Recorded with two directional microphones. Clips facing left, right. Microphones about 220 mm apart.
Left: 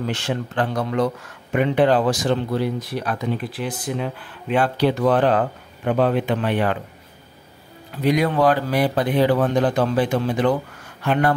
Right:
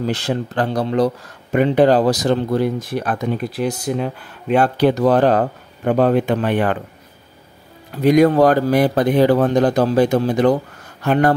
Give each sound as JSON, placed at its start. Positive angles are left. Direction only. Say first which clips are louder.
{"t": 0.0, "sound": "speech", "louder": "right 4 dB", "side_deg": -35}
{"t": 8.0, "sound": "speech", "louder": "right 6 dB", "side_deg": -45}